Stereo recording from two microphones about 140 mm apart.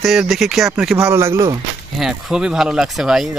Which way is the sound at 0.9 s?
20° right (ahead or behind).